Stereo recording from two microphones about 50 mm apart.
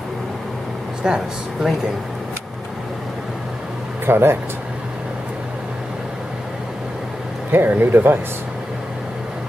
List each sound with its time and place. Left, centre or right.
1.0 s speech: centre
4.0 s speech: right
7.5 s speech: right